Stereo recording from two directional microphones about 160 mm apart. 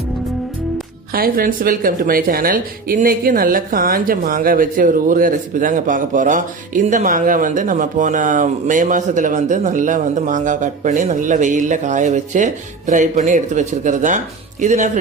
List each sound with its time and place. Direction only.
1.1 s speech: 65° right (ahead or behind); by 14.8 s 45° right (ahead or behind)